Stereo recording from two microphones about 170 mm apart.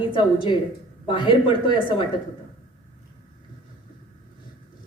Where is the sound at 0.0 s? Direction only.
30° left (ahead or behind).